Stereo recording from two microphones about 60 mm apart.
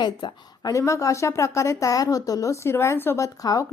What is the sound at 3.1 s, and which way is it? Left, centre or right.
Speech, left.